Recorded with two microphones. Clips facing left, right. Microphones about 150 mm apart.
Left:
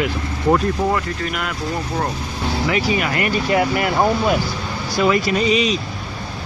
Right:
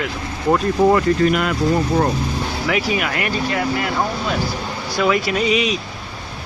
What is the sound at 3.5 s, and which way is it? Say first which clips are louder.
Speech: left 3 dB; 25° left (ahead or behind).